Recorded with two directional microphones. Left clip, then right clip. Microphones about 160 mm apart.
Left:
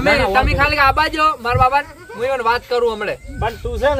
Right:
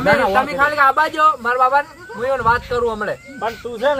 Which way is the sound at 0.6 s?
10° left (ahead or behind).